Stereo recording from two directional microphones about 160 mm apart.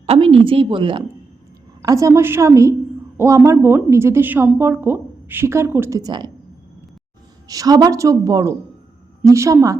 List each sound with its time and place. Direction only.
0.0 s speech: 35° right (ahead or behind)
1.8 s a woman's voice: 20° right (ahead or behind)
7.4 s a woman's voice: 20° right (ahead or behind)